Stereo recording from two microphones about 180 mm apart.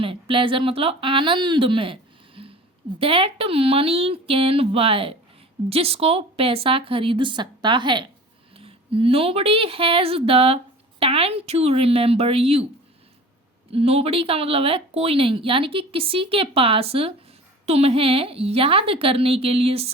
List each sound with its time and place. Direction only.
0.0 s speech: 30° right (ahead or behind)
13.7 s speech: 35° right (ahead or behind)